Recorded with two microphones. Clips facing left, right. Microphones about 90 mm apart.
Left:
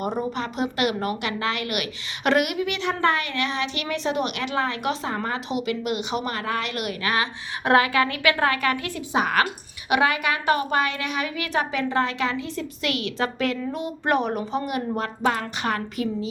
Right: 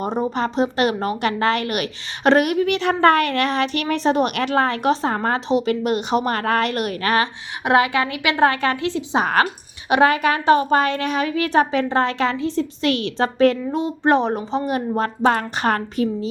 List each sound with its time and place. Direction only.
0.0 s a woman's voice: 25° right (ahead or behind)
7.6 s a woman's voice: 20° right (ahead or behind)
9.2 s a woman's voice: 35° right (ahead or behind)
13.7 s a woman's voice: 25° right (ahead or behind); by 16.0 s 40° right (ahead or behind)